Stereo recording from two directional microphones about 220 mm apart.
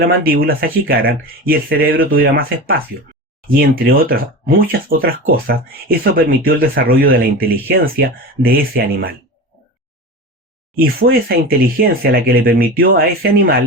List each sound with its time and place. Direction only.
0.2 s speech: 40° right (ahead or behind)
10.8 s speech: 45° right (ahead or behind)